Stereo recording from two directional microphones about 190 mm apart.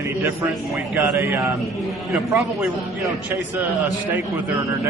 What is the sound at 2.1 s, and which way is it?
Speech, centre (ahead or behind).